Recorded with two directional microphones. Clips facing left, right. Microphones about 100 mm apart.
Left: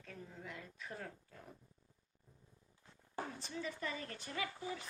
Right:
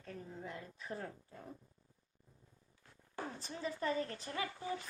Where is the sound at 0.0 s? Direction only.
35° right (ahead or behind).